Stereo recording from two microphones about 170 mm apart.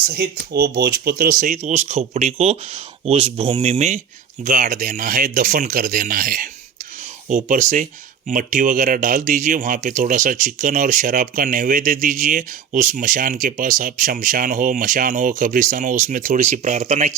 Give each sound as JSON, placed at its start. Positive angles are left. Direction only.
{"t": 0.1, "sound": "speech", "side_deg": -65}
{"t": 1.5, "sound": "speech", "side_deg": -45}